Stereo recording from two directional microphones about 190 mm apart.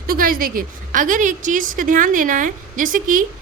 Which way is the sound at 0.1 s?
50° right (ahead or behind).